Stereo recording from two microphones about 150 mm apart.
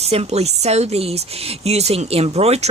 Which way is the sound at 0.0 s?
45° right (ahead or behind).